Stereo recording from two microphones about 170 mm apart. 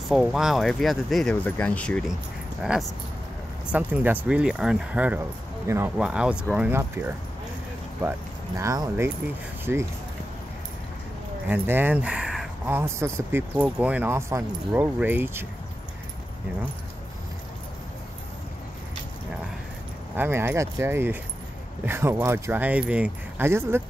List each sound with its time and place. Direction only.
0.1 s speech: centre (ahead or behind)
3.7 s speech: 10° right (ahead or behind)
11.4 s speech: 10° right (ahead or behind)
20.2 s speech: 15° right (ahead or behind)